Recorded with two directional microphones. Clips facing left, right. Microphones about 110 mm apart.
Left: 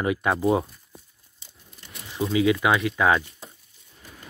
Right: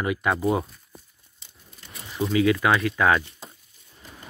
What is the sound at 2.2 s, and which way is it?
Speech, 20° left (ahead or behind).